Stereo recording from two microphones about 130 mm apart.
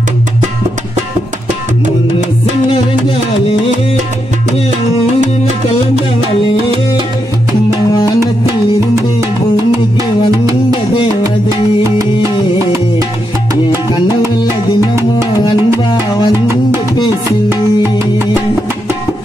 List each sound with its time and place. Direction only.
5.9 s music: 50° right (ahead or behind)
10.7 s music: 40° left (ahead or behind)
11.8 s music: 25° right (ahead or behind)
15.3 s music: 35° left (ahead or behind)
17.5 s music: 20° right (ahead or behind)